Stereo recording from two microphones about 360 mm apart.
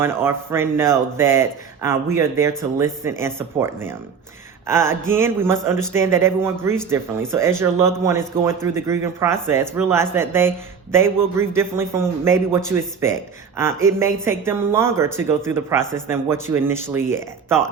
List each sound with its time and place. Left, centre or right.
0.0 s speech: centre
5.7 s speech: centre
6.0 s speech: centre